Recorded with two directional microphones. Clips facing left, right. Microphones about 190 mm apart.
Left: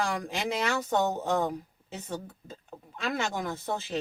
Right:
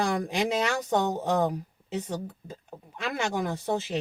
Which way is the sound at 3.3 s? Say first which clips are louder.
Right 4 dB; 15° right (ahead or behind).